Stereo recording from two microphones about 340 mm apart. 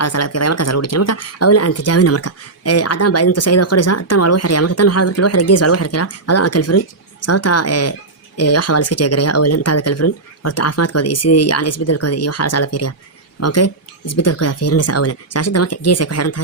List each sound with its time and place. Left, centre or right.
0.0 s speech: left